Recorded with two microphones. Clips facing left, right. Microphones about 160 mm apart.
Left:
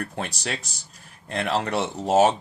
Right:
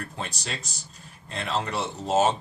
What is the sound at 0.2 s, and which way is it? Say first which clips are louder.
Speech: left 4 dB; 65° left (ahead or behind).